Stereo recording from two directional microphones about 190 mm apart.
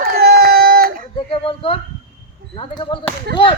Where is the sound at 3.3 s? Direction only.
55° right (ahead or behind).